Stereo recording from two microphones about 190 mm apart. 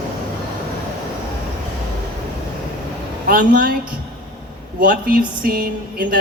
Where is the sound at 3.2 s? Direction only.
50° right (ahead or behind).